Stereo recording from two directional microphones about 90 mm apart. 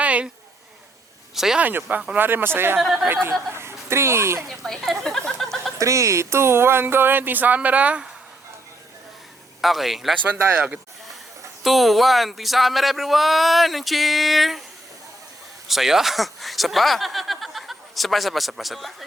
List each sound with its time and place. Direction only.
0.0 s a sound: 15° right (ahead or behind)
1.4 s speech: 5° right (ahead or behind)
1.6 s speech: 20° right (ahead or behind)
2.7 s speech: 5° right (ahead or behind)
3.5 s speech: 30° right (ahead or behind)
4.4 s speech: 5° left (ahead or behind)
5.8 s speech: 35° right (ahead or behind); by 8.0 s 15° right (ahead or behind)
9.6 s speech: centre (ahead or behind)
10.4 s speech: 20° right (ahead or behind)
11.6 s speech: centre (ahead or behind)
15.6 s speech: centre (ahead or behind)